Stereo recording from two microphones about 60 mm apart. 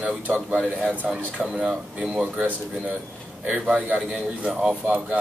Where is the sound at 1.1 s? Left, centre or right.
Centre.